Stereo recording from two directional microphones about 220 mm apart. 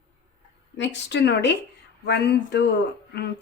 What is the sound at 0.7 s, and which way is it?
Speech, 55° left (ahead or behind).